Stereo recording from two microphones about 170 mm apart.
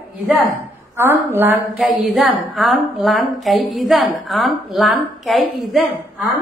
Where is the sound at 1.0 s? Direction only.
15° right (ahead or behind).